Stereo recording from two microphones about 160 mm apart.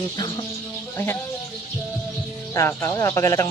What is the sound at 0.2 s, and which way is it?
Speech, 30° left (ahead or behind).